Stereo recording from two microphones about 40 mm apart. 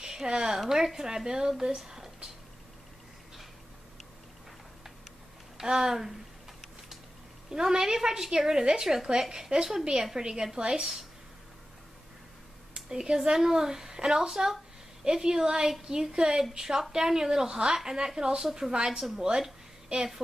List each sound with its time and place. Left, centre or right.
0.0 s a woman's voice: centre
5.6 s a woman's voice: centre
7.4 s a woman's voice: centre
12.7 s a woman's voice: centre